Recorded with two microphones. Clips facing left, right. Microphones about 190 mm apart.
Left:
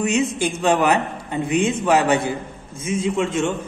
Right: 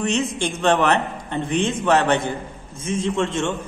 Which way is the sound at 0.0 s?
15° left (ahead or behind).